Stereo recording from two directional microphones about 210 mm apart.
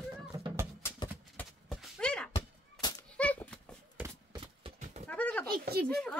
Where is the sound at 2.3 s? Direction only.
15° left (ahead or behind).